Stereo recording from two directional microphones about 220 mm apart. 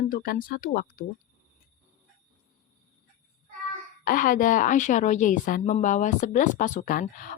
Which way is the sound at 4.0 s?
40° left (ahead or behind).